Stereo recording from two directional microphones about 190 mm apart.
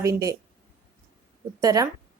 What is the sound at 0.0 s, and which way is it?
Speech, 15° right (ahead or behind).